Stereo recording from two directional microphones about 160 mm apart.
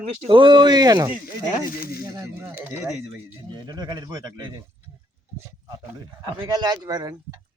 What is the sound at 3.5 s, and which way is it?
Speech, 25° right (ahead or behind).